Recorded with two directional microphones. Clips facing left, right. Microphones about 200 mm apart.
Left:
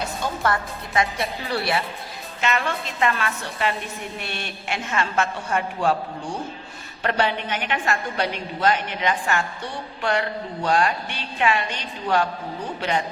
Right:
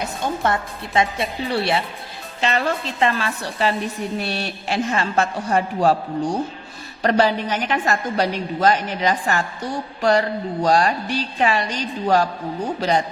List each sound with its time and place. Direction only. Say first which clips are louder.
0.2 s a woman's voice: right 3 dB; 25° right (ahead or behind)
7.0 s a woman's voice: right 5 dB; 35° right (ahead or behind)